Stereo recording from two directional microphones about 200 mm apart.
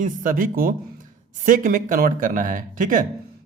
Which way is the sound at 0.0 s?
40° right (ahead or behind).